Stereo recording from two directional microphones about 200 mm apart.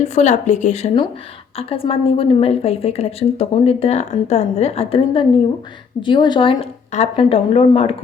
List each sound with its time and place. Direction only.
0.0 s a woman's voice: 35° left (ahead or behind)